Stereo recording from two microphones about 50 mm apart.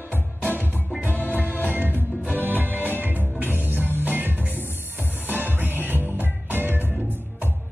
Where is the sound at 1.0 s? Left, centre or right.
Left.